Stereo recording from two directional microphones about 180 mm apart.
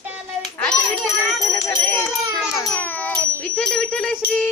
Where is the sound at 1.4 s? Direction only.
15° left (ahead or behind).